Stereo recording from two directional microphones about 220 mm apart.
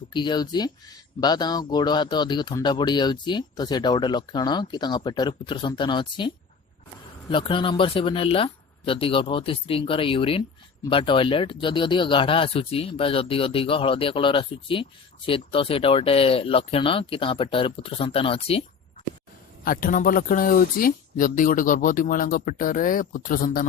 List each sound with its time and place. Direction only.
0.1 s speech: 20° left (ahead or behind)
19.6 s speech: 40° left (ahead or behind)